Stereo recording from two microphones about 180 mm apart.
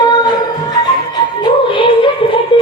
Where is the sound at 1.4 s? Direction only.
30° left (ahead or behind).